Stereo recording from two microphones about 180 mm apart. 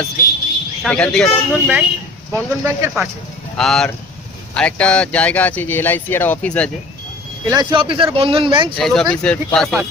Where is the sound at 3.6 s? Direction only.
5° left (ahead or behind).